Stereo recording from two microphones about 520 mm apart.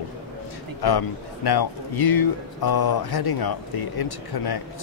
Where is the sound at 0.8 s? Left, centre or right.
Left.